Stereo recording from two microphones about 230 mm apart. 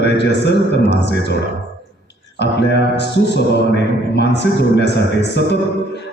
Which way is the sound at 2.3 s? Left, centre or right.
Left.